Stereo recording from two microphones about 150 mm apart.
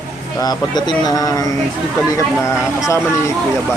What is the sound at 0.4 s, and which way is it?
Speech, 25° left (ahead or behind).